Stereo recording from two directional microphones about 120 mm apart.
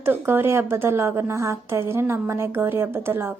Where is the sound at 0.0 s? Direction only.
20° right (ahead or behind).